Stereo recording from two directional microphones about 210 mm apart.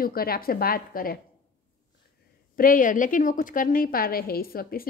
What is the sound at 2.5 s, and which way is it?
A woman's voice, 40° left (ahead or behind).